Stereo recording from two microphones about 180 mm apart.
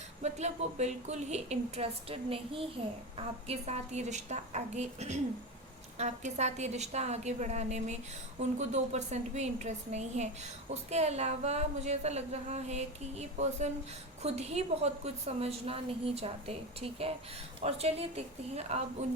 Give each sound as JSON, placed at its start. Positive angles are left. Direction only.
{"t": 0.2, "sound": "a woman's voice", "side_deg": -40}